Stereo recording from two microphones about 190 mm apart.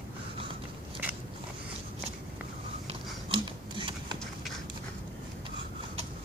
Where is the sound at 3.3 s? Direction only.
25° right (ahead or behind).